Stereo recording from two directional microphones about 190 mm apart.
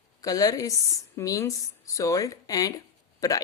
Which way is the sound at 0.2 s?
20° left (ahead or behind).